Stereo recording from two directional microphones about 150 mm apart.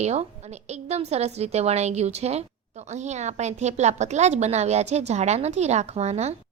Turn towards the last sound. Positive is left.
turn(degrees=-45)  # may be behind; listen again after turning